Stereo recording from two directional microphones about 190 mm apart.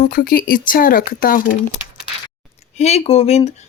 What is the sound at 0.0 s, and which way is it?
Speech, 50° left (ahead or behind).